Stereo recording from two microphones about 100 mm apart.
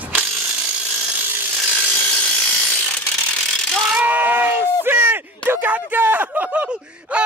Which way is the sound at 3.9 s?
15° right (ahead or behind).